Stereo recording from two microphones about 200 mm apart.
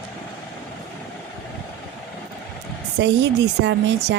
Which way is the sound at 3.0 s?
60° right (ahead or behind).